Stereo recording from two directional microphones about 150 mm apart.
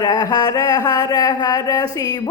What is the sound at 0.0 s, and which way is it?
Speech, 25° left (ahead or behind).